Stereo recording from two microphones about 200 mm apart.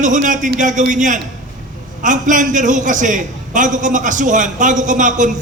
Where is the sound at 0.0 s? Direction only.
40° right (ahead or behind).